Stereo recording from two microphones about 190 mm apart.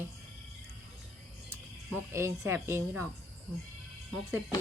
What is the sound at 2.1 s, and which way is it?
Speech, 15° right (ahead or behind).